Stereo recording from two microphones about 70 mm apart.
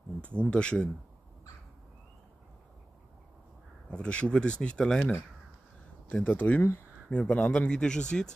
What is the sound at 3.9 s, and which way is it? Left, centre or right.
Speech, centre.